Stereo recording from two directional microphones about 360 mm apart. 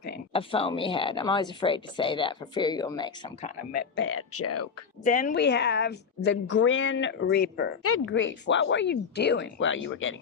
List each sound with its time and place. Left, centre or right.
0.3 s speech: centre; by 4.7 s left
5.0 s a woman's voice: left